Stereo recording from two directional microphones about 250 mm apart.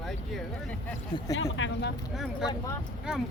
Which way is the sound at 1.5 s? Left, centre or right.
Left.